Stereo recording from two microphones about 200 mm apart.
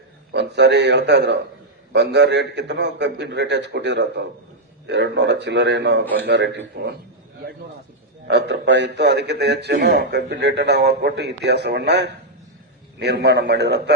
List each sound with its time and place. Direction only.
0.3 s a man's voice: 60° right (ahead or behind)
8.3 s a man's voice: 60° right (ahead or behind)